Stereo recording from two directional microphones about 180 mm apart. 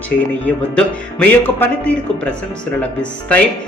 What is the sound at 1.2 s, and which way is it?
A man's voice, 10° left (ahead or behind).